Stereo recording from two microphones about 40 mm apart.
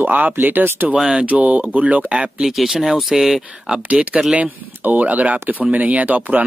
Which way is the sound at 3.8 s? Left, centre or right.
Right.